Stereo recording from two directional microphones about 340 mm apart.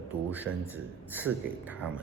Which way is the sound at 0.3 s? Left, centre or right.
Centre.